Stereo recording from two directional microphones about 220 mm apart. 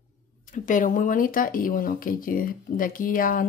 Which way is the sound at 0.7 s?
35° left (ahead or behind).